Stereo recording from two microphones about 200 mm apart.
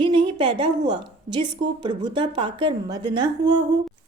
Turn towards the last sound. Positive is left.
turn(degrees=-20)  # may be behind; listen again after turning